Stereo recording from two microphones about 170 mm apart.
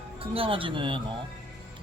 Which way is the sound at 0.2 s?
35° right (ahead or behind).